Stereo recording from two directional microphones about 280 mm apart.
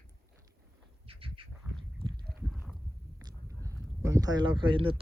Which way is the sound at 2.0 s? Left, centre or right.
Centre.